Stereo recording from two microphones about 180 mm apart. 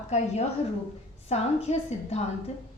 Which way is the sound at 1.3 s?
35° left (ahead or behind).